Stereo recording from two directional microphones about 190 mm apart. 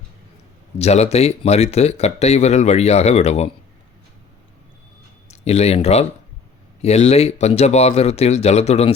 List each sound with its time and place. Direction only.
0.8 s speech: 35° left (ahead or behind)
5.3 s speech: 35° left (ahead or behind)